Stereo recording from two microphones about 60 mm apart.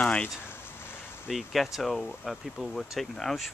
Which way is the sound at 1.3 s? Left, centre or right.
Centre.